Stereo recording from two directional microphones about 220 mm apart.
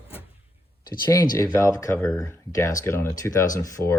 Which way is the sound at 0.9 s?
15° left (ahead or behind).